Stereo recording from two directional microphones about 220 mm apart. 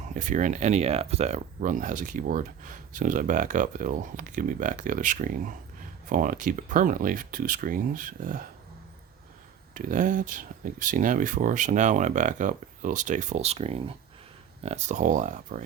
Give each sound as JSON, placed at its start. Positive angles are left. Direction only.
{"t": 0.1, "sound": "speech", "side_deg": -35}
{"t": 9.7, "sound": "speech", "side_deg": -40}